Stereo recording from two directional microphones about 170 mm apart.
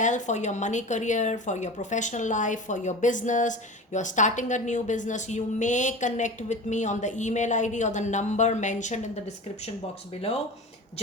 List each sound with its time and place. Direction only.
0.0 s speech: 45° left (ahead or behind)